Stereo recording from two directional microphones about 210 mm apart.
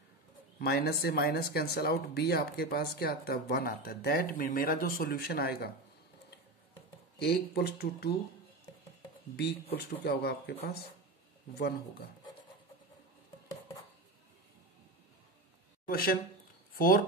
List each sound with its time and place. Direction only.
0.6 s speech: 50° left (ahead or behind)
7.2 s speech: 50° left (ahead or behind)
9.8 s speech: 50° left (ahead or behind)
15.8 s a sound: 45° left (ahead or behind)
16.7 s speech: 40° left (ahead or behind)